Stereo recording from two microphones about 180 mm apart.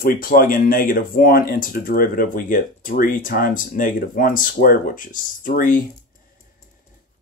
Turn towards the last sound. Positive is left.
turn(degrees=50)  # may be behind; listen again after turning